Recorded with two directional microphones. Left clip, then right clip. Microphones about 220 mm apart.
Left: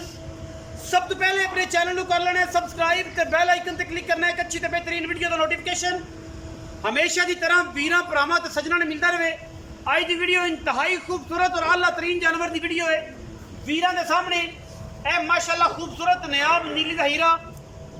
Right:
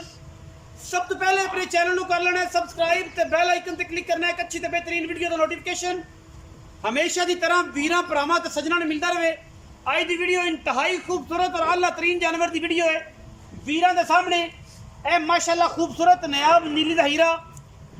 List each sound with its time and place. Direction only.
0.9 s a man's voice: 10° right (ahead or behind)
6.8 s a man's voice: 10° right (ahead or behind); by 17.3 s 30° right (ahead or behind)